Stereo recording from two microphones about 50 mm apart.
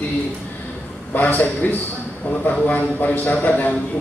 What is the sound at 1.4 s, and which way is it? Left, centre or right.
A man's voice, left.